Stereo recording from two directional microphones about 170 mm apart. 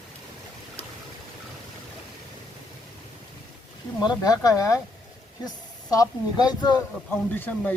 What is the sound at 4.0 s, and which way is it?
Speech, 25° left (ahead or behind).